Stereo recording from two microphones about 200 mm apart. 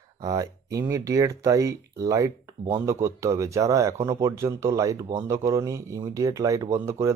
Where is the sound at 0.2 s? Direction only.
20° right (ahead or behind).